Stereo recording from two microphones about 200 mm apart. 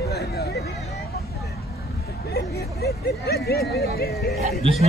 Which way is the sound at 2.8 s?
50° left (ahead or behind).